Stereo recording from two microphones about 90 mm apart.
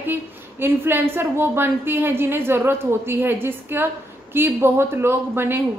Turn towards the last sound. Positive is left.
turn(degrees=-25)  # may be behind; listen again after turning